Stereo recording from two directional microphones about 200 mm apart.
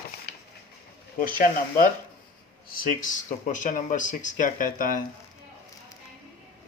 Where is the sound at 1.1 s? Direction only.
45° left (ahead or behind).